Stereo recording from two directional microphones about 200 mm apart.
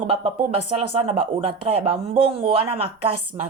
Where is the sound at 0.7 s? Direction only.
30° right (ahead or behind).